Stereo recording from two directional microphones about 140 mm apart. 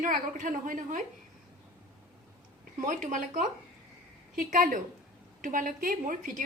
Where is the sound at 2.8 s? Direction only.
65° right (ahead or behind).